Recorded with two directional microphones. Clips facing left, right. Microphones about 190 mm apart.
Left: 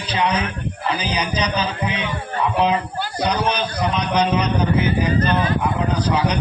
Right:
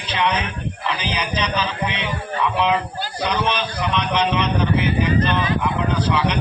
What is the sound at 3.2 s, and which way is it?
A man's voice, 40° left (ahead or behind).